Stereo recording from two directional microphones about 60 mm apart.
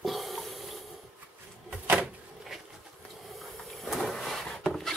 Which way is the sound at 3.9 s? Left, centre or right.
Centre.